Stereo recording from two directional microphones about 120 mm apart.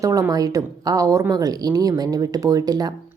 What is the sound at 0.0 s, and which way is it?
A woman's voice, 30° right (ahead or behind).